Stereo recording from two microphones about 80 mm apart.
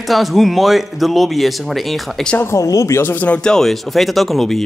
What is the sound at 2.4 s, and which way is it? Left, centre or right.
Speech, left.